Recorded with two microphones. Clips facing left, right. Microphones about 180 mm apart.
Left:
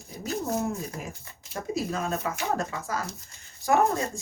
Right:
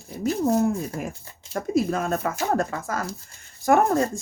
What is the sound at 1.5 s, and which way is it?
Speech, 60° right (ahead or behind).